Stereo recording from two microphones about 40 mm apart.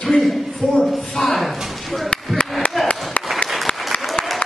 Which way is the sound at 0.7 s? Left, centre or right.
Left.